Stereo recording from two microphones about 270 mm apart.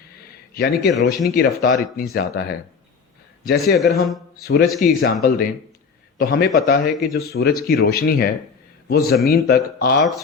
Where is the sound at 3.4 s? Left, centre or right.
Left.